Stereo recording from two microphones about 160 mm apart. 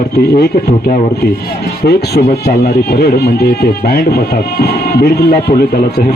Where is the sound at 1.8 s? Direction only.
85° left.